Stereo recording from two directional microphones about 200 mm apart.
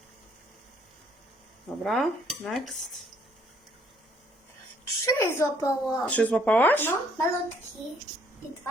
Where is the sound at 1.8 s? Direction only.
Centre (ahead or behind).